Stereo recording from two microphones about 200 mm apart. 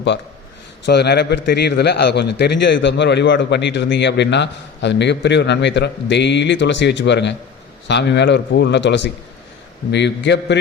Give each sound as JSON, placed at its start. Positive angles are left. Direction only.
{"t": 0.9, "sound": "a man's voice", "side_deg": 55}